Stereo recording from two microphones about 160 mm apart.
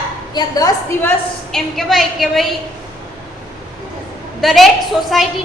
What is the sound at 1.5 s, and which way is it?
Speech, centre (ahead or behind).